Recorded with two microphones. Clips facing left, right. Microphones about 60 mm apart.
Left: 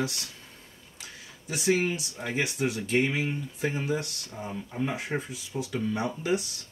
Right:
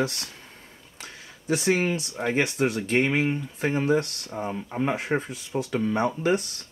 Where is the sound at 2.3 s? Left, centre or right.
Right.